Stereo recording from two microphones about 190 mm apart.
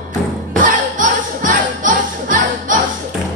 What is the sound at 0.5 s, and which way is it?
Music, 45° right (ahead or behind).